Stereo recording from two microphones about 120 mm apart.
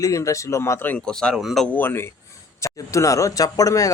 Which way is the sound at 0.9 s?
5° left (ahead or behind).